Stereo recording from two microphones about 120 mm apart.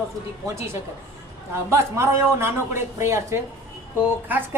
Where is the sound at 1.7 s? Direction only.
20° right (ahead or behind).